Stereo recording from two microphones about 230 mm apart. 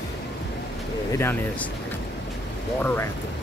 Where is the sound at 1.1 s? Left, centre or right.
Centre.